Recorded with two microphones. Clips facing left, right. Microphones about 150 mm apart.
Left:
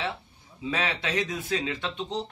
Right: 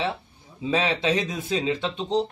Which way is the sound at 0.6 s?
25° right (ahead or behind).